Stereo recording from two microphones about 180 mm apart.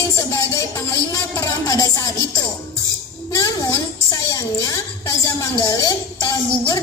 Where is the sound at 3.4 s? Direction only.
20° left (ahead or behind).